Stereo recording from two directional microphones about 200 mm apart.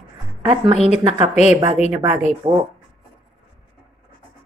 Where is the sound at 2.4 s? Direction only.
25° right (ahead or behind).